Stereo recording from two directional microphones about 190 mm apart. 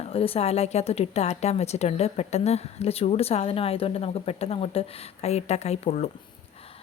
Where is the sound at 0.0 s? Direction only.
30° left (ahead or behind).